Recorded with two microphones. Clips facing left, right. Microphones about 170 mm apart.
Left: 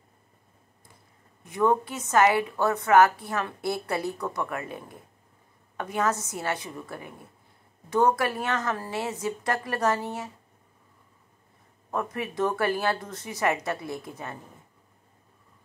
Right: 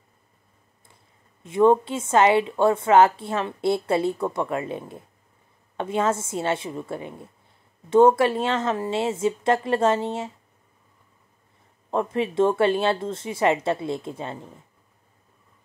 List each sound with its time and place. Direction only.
1.4 s a woman's voice: 25° right (ahead or behind)
11.9 s a woman's voice: 25° right (ahead or behind)